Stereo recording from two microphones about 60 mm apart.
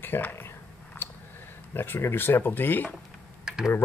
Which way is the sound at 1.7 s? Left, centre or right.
Left.